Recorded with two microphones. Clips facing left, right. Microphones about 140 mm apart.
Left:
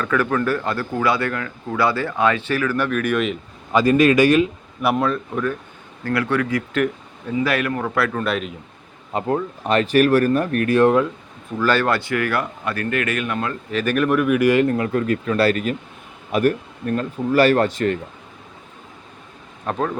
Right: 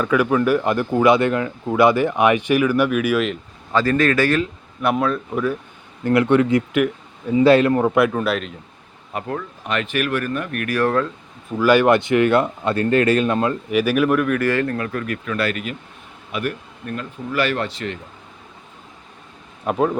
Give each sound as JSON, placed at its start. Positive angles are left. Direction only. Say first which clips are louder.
{"t": 0.0, "sound": "speech", "louder": "right 3 dB", "side_deg": -10}
{"t": 3.7, "sound": "speech", "louder": "left 3 dB", "side_deg": 15}
{"t": 4.8, "sound": "speech", "louder": "even", "side_deg": 0}
{"t": 6.1, "sound": "speech", "louder": "right 6 dB", "side_deg": -20}
{"t": 8.2, "sound": "speech", "louder": "right 1 dB", "side_deg": 0}
{"t": 9.1, "sound": "speech", "louder": "left 5 dB", "side_deg": 30}
{"t": 11.5, "sound": "speech", "louder": "right 5 dB", "side_deg": -15}
{"t": 13.7, "sound": "speech", "louder": "even", "side_deg": -10}
{"t": 14.3, "sound": "speech", "louder": "left 4 dB", "side_deg": 15}
{"t": 19.6, "sound": "speech", "louder": "right 4 dB", "side_deg": -10}